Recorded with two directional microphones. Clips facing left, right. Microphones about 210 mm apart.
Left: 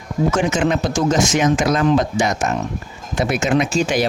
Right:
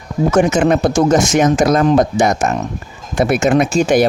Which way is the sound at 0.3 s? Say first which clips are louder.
Right 8 dB; 50° right (ahead or behind).